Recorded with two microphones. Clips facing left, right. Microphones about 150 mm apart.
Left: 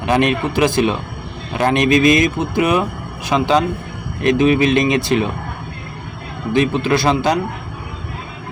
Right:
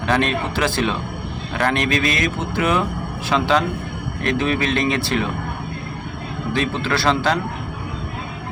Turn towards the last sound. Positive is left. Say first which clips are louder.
# left 4 dB
turn(degrees=15)  # may be behind; listen again after turning